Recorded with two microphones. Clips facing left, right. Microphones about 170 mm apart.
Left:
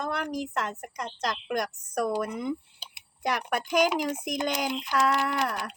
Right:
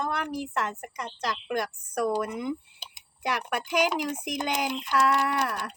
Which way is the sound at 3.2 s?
40° left (ahead or behind).